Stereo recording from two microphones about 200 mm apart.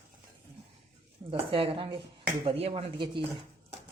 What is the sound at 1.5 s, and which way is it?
Speech, 30° right (ahead or behind).